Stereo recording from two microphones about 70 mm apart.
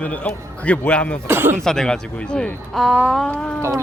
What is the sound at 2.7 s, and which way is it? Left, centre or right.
Speech, centre.